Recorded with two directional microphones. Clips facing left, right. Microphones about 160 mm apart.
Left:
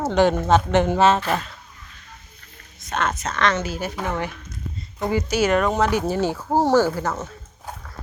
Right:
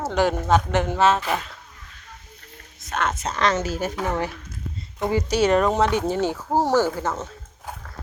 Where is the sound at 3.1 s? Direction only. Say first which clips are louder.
Even; 30° right (ahead or behind).